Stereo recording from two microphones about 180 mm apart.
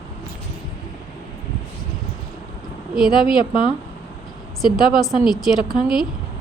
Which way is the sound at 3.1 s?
25° left (ahead or behind).